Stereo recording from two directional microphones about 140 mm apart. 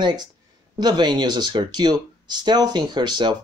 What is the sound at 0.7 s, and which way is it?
Speech, 30° right (ahead or behind).